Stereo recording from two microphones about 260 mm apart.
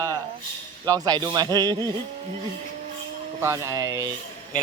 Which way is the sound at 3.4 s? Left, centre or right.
Centre.